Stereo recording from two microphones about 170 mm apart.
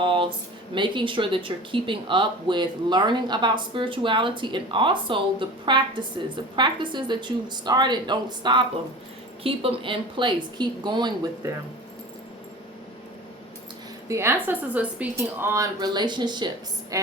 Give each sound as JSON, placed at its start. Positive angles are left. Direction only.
{"t": 0.0, "sound": "speech", "side_deg": -30}
{"t": 14.1, "sound": "a woman's voice", "side_deg": -15}